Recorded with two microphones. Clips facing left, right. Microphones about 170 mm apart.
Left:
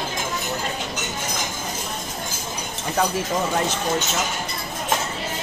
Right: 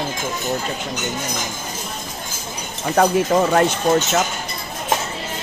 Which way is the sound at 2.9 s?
60° right (ahead or behind).